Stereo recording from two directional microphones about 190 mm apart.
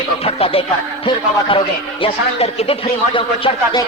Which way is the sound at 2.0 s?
30° left (ahead or behind).